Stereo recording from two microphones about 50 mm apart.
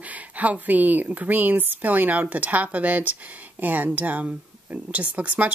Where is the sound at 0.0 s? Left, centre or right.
Right.